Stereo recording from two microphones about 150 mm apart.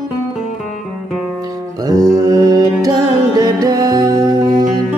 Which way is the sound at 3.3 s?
25° right (ahead or behind).